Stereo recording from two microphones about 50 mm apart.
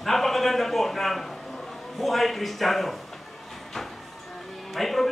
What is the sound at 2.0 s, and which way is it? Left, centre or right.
Speech, centre.